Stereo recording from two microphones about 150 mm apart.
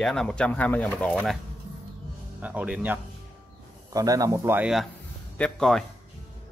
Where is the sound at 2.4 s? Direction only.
10° right (ahead or behind).